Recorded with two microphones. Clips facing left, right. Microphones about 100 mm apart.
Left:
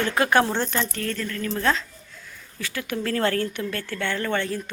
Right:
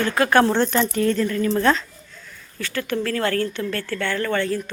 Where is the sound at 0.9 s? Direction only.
15° right (ahead or behind).